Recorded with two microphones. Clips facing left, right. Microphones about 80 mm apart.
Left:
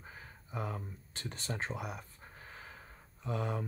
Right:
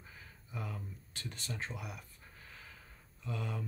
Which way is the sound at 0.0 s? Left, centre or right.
Left.